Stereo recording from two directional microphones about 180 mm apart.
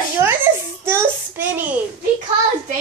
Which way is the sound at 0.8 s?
15° right (ahead or behind).